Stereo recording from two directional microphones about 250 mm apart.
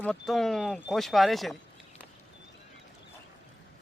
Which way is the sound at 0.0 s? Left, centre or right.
Centre.